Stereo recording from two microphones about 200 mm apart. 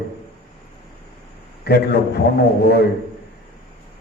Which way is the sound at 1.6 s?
55° left (ahead or behind).